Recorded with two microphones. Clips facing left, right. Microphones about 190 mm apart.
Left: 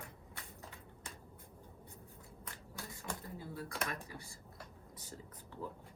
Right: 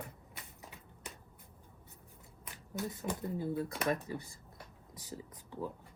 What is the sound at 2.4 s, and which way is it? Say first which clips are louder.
Speech: right 11 dB; 15° right (ahead or behind).